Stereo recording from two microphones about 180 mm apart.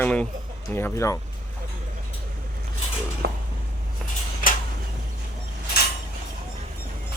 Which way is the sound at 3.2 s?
60° right (ahead or behind).